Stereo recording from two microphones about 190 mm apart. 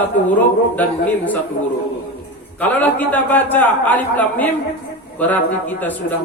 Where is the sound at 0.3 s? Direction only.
10° left (ahead or behind).